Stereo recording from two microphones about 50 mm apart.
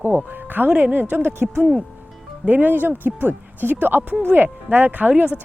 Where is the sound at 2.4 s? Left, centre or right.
Right.